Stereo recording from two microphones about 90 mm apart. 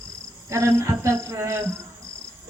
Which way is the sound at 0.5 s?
35° right (ahead or behind).